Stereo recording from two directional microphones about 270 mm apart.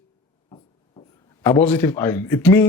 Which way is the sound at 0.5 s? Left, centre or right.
Centre.